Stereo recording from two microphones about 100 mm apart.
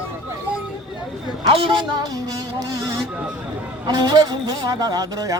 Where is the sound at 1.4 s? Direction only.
65° right (ahead or behind).